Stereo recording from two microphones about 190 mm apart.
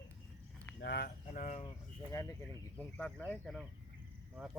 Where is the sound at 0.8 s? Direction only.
60° left (ahead or behind); by 1.6 s 40° left (ahead or behind).